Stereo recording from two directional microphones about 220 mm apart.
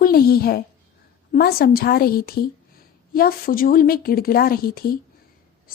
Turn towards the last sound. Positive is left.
turn(degrees=40)  # may be behind; listen again after turning